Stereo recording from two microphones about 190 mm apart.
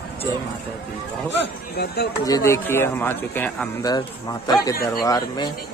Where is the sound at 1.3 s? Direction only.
55° left (ahead or behind).